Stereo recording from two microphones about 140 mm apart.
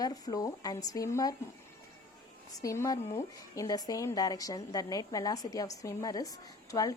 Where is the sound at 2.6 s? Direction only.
25° left (ahead or behind).